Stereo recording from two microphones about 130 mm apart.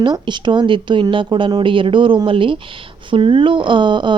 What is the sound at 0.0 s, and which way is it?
Speech, 35° right (ahead or behind).